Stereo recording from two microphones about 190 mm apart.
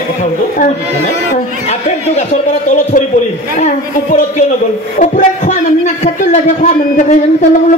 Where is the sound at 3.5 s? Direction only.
35° left (ahead or behind).